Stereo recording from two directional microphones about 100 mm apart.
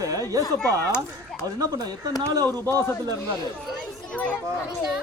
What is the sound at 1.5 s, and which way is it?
Speech, 40° right (ahead or behind).